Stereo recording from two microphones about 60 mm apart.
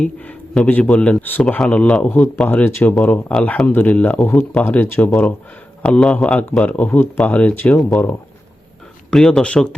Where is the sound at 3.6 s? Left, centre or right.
Left.